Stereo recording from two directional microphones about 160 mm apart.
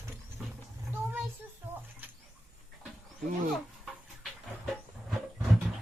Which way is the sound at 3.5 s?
Centre (ahead or behind).